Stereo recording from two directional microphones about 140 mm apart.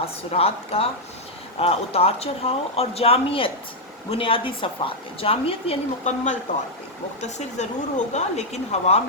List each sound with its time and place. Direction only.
0.0 s a woman's voice: 45° left (ahead or behind)